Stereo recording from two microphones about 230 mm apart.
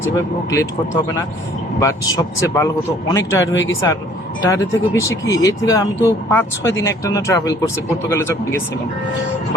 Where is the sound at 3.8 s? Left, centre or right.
Centre.